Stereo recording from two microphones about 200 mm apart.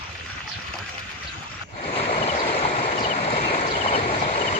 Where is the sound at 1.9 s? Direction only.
30° left (ahead or behind).